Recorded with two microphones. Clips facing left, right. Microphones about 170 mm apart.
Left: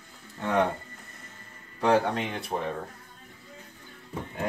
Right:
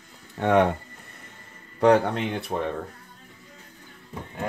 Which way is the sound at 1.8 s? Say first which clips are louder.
Right 5 dB; 65° right (ahead or behind).